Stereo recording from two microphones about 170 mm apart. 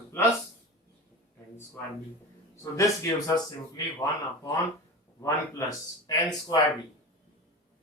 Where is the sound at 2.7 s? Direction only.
20° left (ahead or behind).